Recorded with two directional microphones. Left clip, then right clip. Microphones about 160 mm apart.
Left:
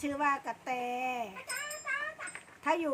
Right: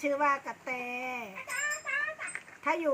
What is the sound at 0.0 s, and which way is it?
Speech, 70° left (ahead or behind).